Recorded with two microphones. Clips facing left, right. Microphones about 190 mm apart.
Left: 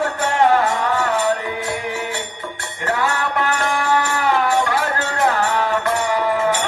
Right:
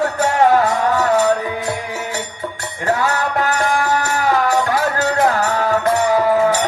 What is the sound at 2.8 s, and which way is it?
Music, 40° right (ahead or behind).